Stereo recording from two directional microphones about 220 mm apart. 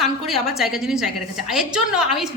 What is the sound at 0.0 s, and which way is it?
A woman's voice, centre (ahead or behind).